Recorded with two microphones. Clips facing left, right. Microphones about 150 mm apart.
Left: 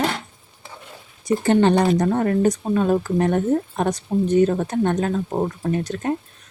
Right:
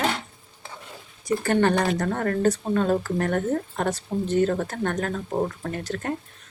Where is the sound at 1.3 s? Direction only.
20° left (ahead or behind).